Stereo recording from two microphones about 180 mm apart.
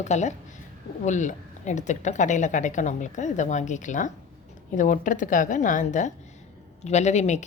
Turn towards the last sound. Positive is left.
turn(degrees=40)  # may be behind; listen again after turning